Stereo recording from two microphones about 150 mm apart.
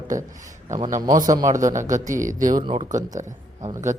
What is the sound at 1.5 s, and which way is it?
Speech, 60° right (ahead or behind).